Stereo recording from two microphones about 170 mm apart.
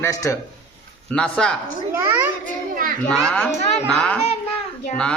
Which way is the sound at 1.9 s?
15° right (ahead or behind).